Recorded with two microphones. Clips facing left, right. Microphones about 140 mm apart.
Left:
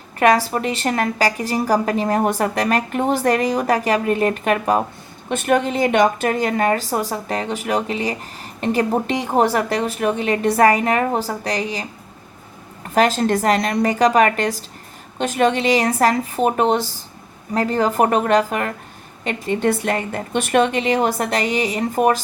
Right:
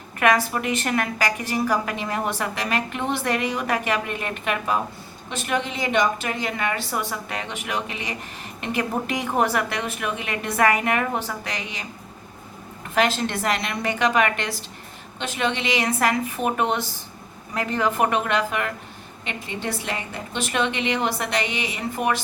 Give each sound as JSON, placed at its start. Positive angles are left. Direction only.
{"t": 0.2, "sound": "a woman's voice", "side_deg": 35}
{"t": 12.9, "sound": "a woman's voice", "side_deg": 40}